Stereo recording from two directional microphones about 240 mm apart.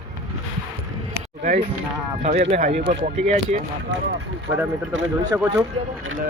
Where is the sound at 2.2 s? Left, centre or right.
Right.